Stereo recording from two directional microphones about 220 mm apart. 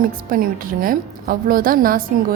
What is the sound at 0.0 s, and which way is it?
A woman's voice, 40° right (ahead or behind).